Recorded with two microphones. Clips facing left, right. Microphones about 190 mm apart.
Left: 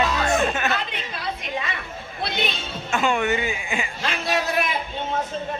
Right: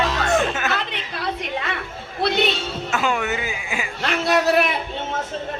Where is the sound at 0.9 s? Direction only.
65° right (ahead or behind).